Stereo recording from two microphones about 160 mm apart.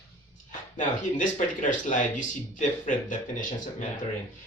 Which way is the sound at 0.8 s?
50° left (ahead or behind).